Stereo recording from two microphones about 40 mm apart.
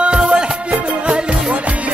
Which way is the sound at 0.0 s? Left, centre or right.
Right.